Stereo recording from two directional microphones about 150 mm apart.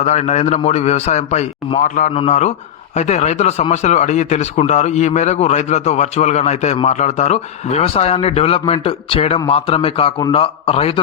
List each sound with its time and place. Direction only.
0.0 s speech: 50° left (ahead or behind)
2.1 s a man's voice: 45° left (ahead or behind)